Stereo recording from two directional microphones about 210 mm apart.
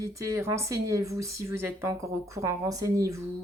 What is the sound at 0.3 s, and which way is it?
Speech, 15° right (ahead or behind).